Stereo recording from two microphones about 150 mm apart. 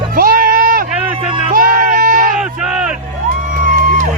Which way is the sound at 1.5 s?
65° right (ahead or behind).